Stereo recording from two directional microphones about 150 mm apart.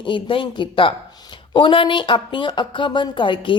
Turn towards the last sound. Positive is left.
turn(degrees=35)  # may be behind; listen again after turning